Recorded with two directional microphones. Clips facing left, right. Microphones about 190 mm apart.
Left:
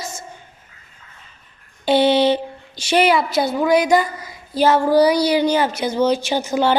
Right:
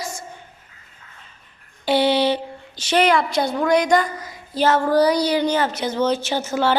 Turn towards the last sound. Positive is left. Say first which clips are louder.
# left 2 dB
turn(degrees=15)  # may be behind; listen again after turning